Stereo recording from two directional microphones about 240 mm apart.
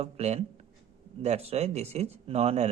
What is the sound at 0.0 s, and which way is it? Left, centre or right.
Speech, right.